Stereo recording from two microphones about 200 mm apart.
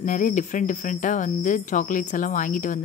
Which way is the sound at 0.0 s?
40° left (ahead or behind).